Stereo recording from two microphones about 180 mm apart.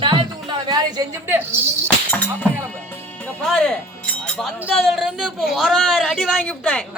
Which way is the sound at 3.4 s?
Centre (ahead or behind).